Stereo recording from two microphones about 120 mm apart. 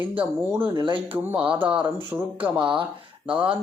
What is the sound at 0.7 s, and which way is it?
Speech, 40° right (ahead or behind).